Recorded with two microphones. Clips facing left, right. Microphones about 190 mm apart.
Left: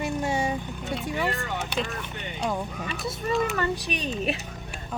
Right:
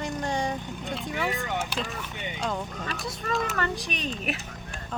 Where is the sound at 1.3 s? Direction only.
Centre (ahead or behind).